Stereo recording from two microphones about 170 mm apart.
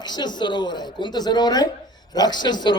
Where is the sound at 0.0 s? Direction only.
25° left (ahead or behind).